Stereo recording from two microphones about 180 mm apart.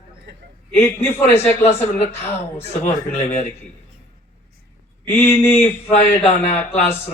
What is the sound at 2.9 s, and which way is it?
Speech, 35° left (ahead or behind).